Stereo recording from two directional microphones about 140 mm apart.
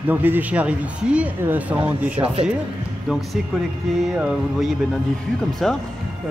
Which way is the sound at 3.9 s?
5° right (ahead or behind).